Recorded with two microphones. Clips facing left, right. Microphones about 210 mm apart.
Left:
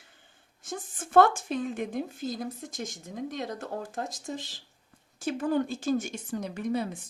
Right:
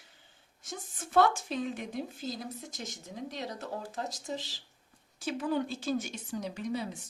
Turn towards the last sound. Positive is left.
turn(degrees=55)  # may be behind; listen again after turning